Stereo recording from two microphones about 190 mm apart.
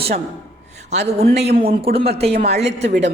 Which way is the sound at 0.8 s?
35° right (ahead or behind).